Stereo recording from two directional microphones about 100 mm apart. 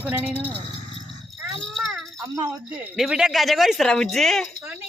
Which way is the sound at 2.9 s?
5° right (ahead or behind).